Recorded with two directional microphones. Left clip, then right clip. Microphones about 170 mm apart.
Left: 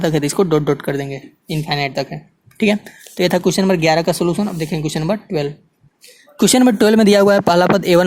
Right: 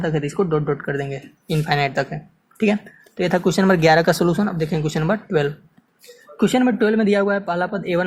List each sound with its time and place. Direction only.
0.4 s speech: 55° left (ahead or behind); by 2.1 s 25° left (ahead or behind)
2.1 s a sound: 35° left (ahead or behind)
3.2 s speech: 35° left (ahead or behind)
6.4 s speech: 55° left (ahead or behind)